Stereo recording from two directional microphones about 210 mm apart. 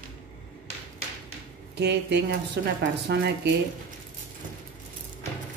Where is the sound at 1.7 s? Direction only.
55° right (ahead or behind).